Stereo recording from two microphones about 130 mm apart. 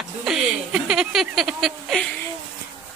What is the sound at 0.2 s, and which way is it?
Speech, 5° right (ahead or behind).